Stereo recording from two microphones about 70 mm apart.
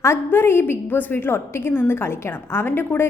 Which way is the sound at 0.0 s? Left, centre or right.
Left.